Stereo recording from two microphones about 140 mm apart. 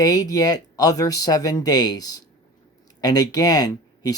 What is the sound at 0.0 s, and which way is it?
Speech, 25° left (ahead or behind).